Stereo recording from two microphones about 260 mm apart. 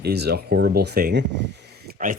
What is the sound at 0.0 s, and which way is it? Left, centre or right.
Speech, right.